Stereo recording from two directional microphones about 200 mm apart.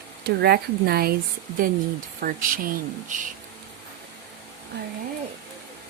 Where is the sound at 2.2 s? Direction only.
45° right (ahead or behind).